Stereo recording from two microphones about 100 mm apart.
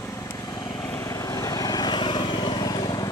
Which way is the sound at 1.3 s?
40° left (ahead or behind).